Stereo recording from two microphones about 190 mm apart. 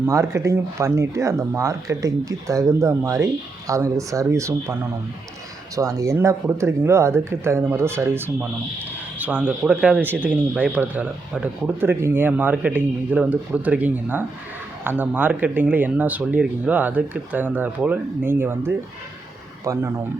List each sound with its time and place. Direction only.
0.0 s speech: 15° right (ahead or behind)